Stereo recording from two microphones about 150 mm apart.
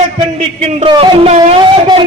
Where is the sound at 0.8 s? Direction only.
35° right (ahead or behind).